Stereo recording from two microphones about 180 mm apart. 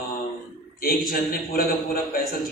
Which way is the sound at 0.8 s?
55° left (ahead or behind).